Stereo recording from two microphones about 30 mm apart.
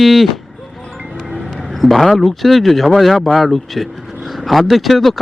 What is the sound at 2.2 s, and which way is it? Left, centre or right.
Speech, centre.